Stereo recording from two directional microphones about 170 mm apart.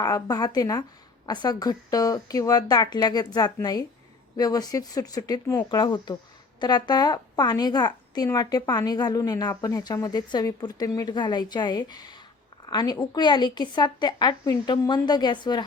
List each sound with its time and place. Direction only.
0.0 s a woman's voice: 20° left (ahead or behind)